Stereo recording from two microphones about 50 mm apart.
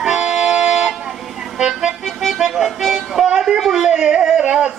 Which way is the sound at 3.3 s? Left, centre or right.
Centre.